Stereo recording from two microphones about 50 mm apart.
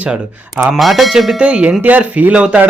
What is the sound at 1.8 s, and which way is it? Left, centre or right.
Speech, right.